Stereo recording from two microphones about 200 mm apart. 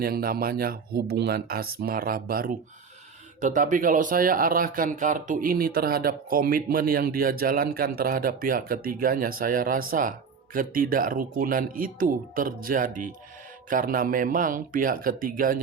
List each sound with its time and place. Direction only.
0.0 s speech: 50° right (ahead or behind)